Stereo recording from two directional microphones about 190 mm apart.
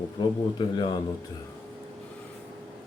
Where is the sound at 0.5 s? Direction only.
25° left (ahead or behind).